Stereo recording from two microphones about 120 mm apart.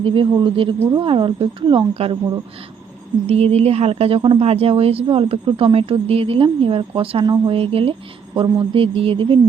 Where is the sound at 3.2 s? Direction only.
60° right (ahead or behind).